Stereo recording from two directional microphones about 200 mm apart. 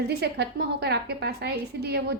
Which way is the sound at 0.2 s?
55° right (ahead or behind).